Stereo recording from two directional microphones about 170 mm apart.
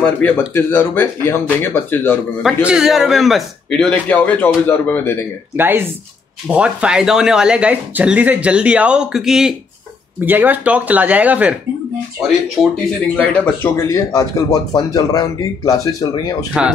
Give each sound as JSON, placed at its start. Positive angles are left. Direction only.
{"t": 0.2, "sound": "speech", "side_deg": 10}
{"t": 2.4, "sound": "speech", "side_deg": -5}
{"t": 5.6, "sound": "speech", "side_deg": -10}
{"t": 12.6, "sound": "speech", "side_deg": 0}
{"t": 13.3, "sound": "speech", "side_deg": 10}